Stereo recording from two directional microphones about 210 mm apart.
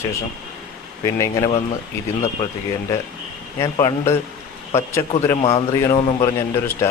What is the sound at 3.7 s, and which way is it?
Speech, 20° left (ahead or behind).